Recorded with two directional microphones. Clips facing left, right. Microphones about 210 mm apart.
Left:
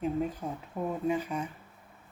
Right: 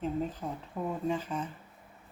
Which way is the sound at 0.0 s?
10° left (ahead or behind).